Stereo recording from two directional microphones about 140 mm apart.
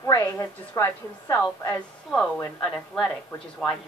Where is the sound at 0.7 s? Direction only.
15° left (ahead or behind).